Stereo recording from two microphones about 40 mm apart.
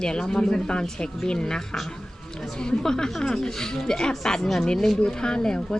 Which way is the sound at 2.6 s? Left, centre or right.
Centre.